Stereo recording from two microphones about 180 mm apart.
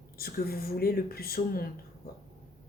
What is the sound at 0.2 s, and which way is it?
Speech, 55° left (ahead or behind).